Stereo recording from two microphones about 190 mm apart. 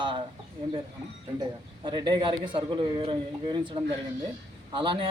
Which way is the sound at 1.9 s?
25° right (ahead or behind).